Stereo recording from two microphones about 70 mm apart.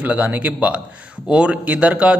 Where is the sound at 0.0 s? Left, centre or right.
Right.